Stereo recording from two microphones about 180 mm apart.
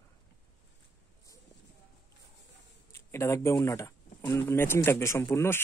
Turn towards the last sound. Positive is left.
turn(degrees=15)  # may be behind; listen again after turning